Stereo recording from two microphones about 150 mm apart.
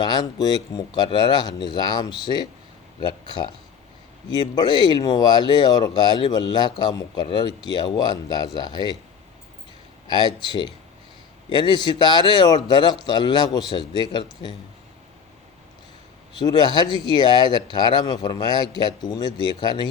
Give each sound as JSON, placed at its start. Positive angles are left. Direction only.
{"t": 0.0, "sound": "speech", "side_deg": 30}
{"t": 10.1, "sound": "a man's voice", "side_deg": 30}
{"t": 16.4, "sound": "speech", "side_deg": 30}